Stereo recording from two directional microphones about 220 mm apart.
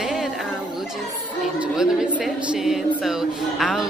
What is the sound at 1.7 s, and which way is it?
A woman's voice, centre (ahead or behind).